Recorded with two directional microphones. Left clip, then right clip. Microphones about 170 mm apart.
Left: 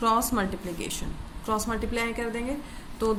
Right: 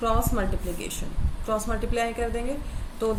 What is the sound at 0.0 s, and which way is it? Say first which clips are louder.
A woman's voice: left 2 dB; 45° left (ahead or behind).